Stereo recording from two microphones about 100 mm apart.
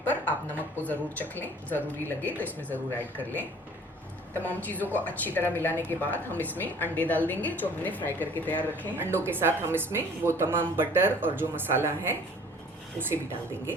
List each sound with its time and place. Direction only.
0.0 s a sound: 15° left (ahead or behind)
0.8 s a woman's voice: 20° left (ahead or behind)
4.4 s a woman's voice: 15° left (ahead or behind)
9.0 s speech: 25° right (ahead or behind)